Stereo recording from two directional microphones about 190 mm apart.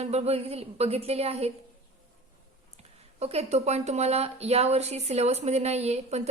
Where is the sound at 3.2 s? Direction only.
35° right (ahead or behind).